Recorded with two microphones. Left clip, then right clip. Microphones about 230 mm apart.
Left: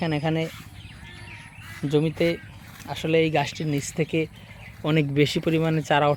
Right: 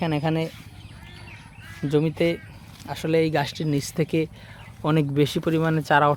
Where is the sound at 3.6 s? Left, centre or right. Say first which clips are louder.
Right 1 dB; centre.